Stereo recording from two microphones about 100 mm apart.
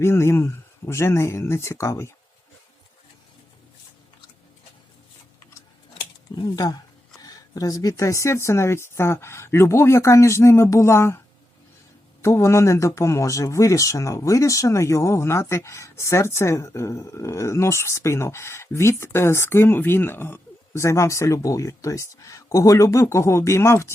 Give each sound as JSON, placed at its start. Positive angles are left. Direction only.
{"t": 0.0, "sound": "speech", "side_deg": 25}
{"t": 6.3, "sound": "speech", "side_deg": 40}
{"t": 12.2, "sound": "speech", "side_deg": 25}